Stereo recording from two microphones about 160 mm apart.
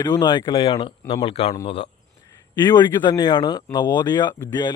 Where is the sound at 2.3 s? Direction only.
25° left (ahead or behind).